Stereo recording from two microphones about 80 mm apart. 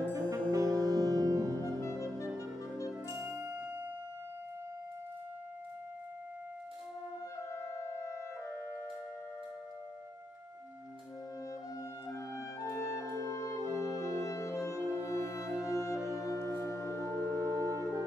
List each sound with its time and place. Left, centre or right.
0.1 s music: right
1.8 s clarinet: left
3.4 s music: right
7.3 s clarinet: left
12.1 s clarinet: left
13.7 s music: left
17.3 s music: right